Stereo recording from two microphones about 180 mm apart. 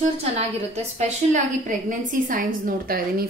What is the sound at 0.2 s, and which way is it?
A woman's voice, 35° right (ahead or behind).